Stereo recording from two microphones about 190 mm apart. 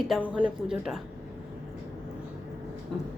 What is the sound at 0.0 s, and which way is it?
Speech, 5° right (ahead or behind).